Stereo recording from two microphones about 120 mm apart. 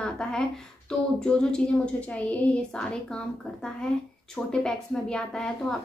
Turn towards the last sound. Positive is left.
turn(degrees=5)  # may be behind; listen again after turning